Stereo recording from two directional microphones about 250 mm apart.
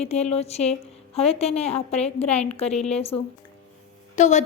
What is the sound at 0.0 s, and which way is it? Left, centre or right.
A woman's voice, left.